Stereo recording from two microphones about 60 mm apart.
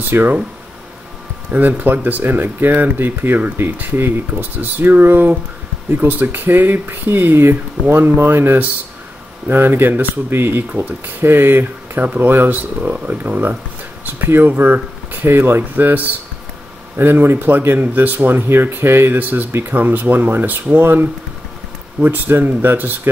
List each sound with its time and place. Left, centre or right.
0.1 s speech: right
1.5 s speech: right